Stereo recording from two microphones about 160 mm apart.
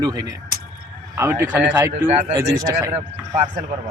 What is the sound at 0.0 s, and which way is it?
Speech, 25° right (ahead or behind).